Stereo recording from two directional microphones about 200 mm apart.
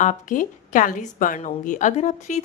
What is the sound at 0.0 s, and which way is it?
A woman's voice, 40° left (ahead or behind).